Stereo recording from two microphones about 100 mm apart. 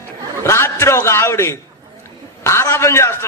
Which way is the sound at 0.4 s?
25° left (ahead or behind).